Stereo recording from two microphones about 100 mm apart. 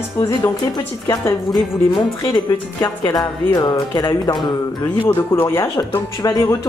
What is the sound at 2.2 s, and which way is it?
Speech, 40° left (ahead or behind).